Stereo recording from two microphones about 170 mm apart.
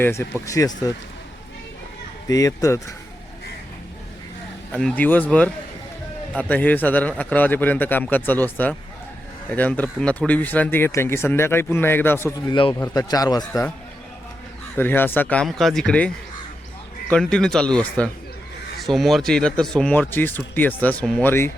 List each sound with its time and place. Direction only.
0.0 s speech: 15° left (ahead or behind)
2.2 s speech: 20° left (ahead or behind)
4.7 s speech: 5° left (ahead or behind)
12.5 s speech: 30° left (ahead or behind)
14.8 s a man's voice: 10° left (ahead or behind)